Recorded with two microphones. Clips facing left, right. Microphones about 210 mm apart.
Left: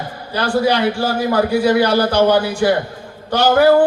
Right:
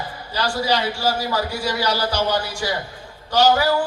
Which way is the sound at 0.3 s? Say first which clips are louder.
Left 6 dB; 55° left (ahead or behind).